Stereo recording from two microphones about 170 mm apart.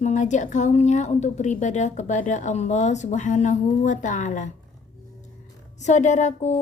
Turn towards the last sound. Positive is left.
turn(degrees=45)  # may be behind; listen again after turning